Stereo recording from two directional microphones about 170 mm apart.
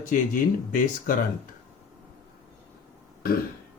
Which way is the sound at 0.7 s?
55° left (ahead or behind).